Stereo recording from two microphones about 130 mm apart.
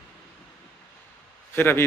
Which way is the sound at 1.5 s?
15° left (ahead or behind).